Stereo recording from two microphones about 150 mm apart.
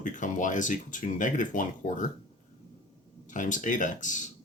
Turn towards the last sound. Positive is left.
turn(degrees=55)  # may be behind; listen again after turning